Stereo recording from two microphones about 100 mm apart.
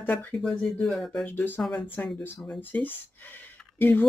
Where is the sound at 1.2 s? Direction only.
20° left (ahead or behind).